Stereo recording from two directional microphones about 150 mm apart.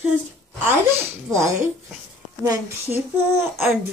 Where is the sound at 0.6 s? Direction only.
15° right (ahead or behind).